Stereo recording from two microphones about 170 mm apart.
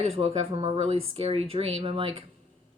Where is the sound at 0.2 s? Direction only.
35° right (ahead or behind).